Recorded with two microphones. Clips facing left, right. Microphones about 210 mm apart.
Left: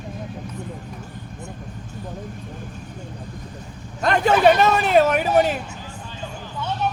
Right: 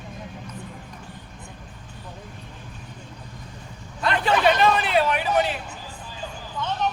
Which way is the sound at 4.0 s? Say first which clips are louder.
Left 5 dB; 45° left (ahead or behind).